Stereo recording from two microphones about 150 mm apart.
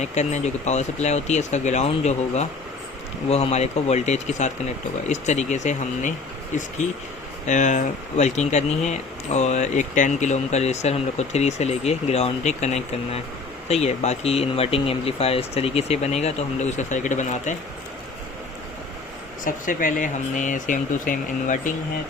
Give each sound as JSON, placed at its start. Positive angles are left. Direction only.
{"t": 0.0, "sound": "speech", "side_deg": 50}
{"t": 7.4, "sound": "speech", "side_deg": 55}
{"t": 19.5, "sound": "speech", "side_deg": 65}